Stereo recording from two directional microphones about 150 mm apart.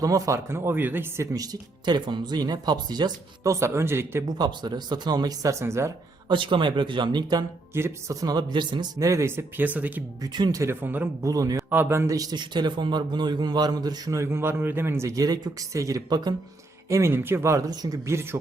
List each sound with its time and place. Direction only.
0.0 s a man's voice: 20° right (ahead or behind)
4.3 s a man's voice: 30° right (ahead or behind)
6.2 s a man's voice: 35° right (ahead or behind); by 10.0 s 10° right (ahead or behind)
10.3 s a man's voice: 25° right (ahead or behind)
16.9 s speech: 15° right (ahead or behind)